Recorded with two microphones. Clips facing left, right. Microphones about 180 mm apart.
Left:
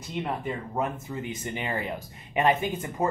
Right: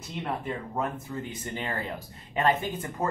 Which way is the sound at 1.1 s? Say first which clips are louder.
Left 2 dB; 15° left (ahead or behind).